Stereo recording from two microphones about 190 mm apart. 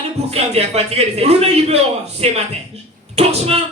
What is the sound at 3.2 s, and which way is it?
Speech, 35° right (ahead or behind).